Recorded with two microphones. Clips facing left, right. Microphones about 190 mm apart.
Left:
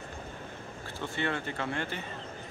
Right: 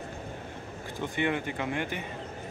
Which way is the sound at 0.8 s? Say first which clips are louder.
Right 4 dB; 15° right (ahead or behind).